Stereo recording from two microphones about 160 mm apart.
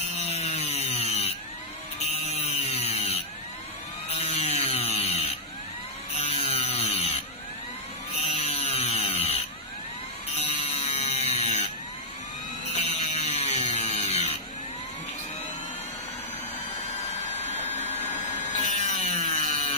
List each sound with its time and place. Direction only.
0.2 s chainsaw: 45° left (ahead or behind)
4.1 s tools: 40° left (ahead or behind)
6.5 s chainsaw: 45° left (ahead or behind)
8.2 s chainsaw: 40° left (ahead or behind)
9.0 s tools: 35° left (ahead or behind)
10.3 s a sound: 50° left (ahead or behind)
12.7 s a sound: 45° left (ahead or behind)
17.2 s vacuum cleaner: 45° left (ahead or behind)
18.5 s wood: 50° left (ahead or behind)
19.5 s tools: 45° left (ahead or behind)